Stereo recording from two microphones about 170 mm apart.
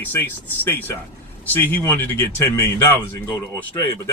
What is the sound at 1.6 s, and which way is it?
Speech, 10° left (ahead or behind).